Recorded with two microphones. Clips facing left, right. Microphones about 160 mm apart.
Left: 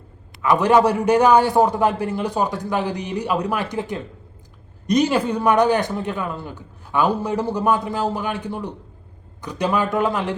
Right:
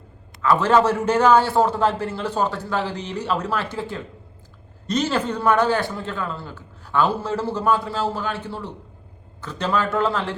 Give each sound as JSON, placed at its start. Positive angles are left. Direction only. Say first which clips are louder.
{"t": 0.4, "sound": "a man's voice", "louder": "left 2 dB", "side_deg": 15}